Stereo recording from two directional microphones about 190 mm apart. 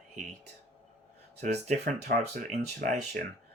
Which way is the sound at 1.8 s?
55° right (ahead or behind).